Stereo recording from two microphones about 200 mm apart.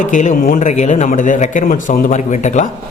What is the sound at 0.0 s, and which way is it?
A man's voice, 40° left (ahead or behind).